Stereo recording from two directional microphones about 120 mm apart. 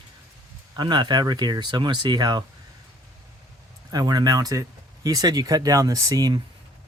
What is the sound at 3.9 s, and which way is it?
Speech, 35° right (ahead or behind).